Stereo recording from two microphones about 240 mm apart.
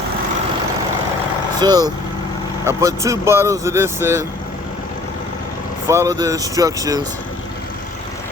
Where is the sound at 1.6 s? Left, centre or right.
Centre.